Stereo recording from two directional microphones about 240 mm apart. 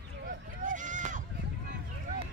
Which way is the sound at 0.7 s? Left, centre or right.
Right.